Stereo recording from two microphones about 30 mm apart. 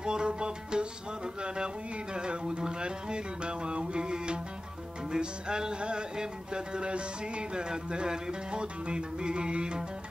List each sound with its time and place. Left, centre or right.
0.0 s music: right
2.1 s music: right